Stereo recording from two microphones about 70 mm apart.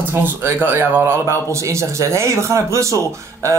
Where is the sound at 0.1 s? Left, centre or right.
Right.